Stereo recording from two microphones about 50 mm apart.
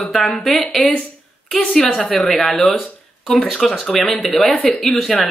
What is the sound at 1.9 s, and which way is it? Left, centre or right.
Speech, centre.